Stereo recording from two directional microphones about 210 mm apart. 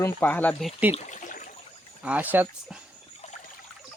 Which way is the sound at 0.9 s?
35° left (ahead or behind).